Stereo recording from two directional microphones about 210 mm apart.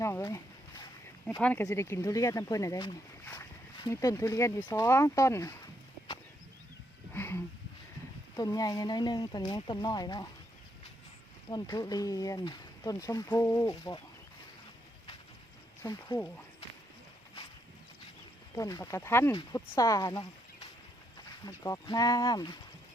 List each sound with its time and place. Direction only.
0.0 s a sound: 15° left (ahead or behind)
1.3 s speech: 10° left (ahead or behind)
7.1 s a sound: 10° left (ahead or behind)
8.4 s speech: 20° left (ahead or behind)
11.4 s speech: 20° left (ahead or behind)
15.8 s speech: 15° left (ahead or behind)
18.5 s speech: 15° left (ahead or behind)